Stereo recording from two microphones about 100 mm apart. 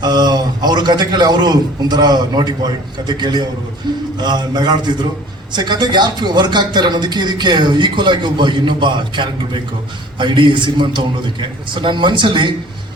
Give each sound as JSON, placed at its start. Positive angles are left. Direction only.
{"t": 0.0, "sound": "speech", "side_deg": -45}